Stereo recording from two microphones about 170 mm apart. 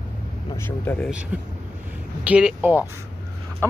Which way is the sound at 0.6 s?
15° left (ahead or behind).